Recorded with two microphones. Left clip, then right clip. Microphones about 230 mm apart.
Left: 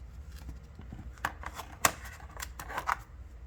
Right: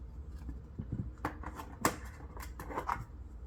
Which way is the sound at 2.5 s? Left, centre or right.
Left.